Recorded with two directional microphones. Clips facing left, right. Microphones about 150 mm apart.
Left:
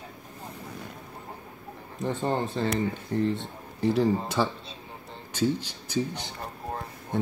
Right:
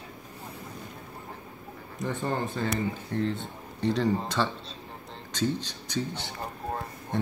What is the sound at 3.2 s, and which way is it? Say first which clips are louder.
Speech: left 3 dB; 5° left (ahead or behind).